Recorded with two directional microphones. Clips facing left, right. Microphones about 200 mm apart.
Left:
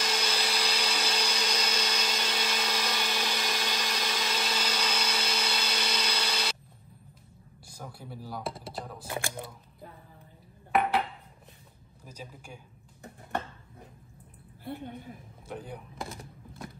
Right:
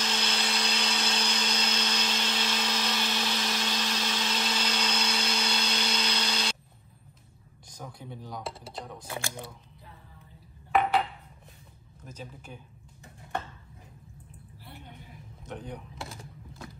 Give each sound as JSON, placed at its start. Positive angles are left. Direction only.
{"t": 0.0, "sound": "blender", "side_deg": 10}
{"t": 7.6, "sound": "speech", "side_deg": 5}
{"t": 12.0, "sound": "a man's voice", "side_deg": 10}
{"t": 14.6, "sound": "a woman's voice", "side_deg": 50}
{"t": 15.4, "sound": "speech", "side_deg": 5}